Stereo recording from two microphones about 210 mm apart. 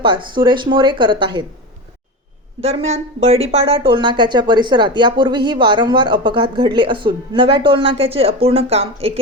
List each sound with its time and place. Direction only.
0.0 s speech: 25° right (ahead or behind)
2.6 s speech: 30° right (ahead or behind)